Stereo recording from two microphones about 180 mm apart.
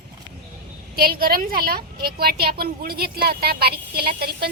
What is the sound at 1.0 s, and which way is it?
A woman's voice, 55° right (ahead or behind).